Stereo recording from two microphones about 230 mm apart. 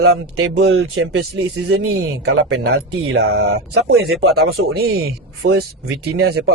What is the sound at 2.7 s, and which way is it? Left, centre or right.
Speech, right.